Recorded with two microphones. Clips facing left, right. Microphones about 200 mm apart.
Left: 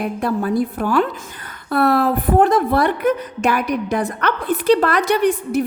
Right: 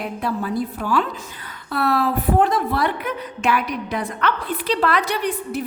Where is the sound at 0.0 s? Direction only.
50° left (ahead or behind).